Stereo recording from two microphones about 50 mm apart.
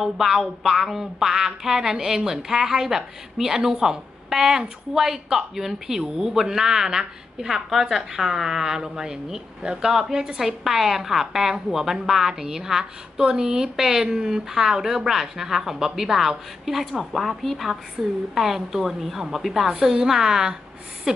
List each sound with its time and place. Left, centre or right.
0.0 s a woman's voice: centre